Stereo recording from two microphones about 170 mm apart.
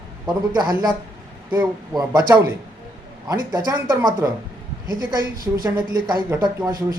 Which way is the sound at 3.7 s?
20° right (ahead or behind).